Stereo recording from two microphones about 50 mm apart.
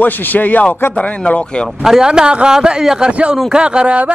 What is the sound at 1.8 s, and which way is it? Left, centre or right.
A man's voice, centre.